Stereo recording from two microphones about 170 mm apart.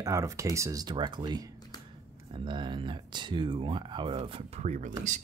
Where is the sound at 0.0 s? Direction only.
20° right (ahead or behind).